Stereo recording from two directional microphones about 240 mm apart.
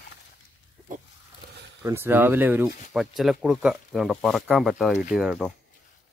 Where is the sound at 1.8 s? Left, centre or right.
Centre.